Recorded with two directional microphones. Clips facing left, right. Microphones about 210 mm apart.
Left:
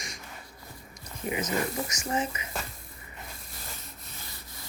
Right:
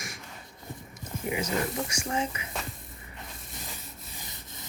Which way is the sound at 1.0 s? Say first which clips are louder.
Right 1 dB; 15° right (ahead or behind).